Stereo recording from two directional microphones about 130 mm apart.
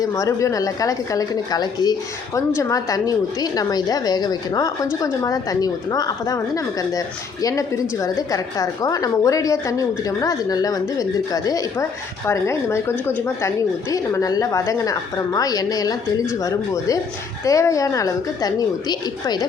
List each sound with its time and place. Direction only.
0.0 s a woman's voice: 25° left (ahead or behind)